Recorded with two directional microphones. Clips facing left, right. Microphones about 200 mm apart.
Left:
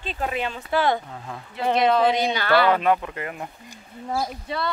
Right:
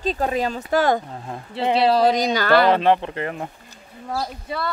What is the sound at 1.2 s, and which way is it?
Speech, 30° right (ahead or behind).